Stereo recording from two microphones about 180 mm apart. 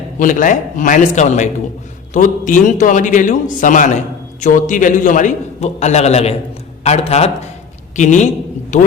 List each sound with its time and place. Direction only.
0.2 s a man's voice: 45° left (ahead or behind)